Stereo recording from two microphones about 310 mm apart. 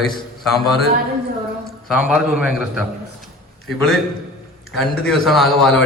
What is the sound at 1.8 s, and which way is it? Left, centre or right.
A man's voice, centre.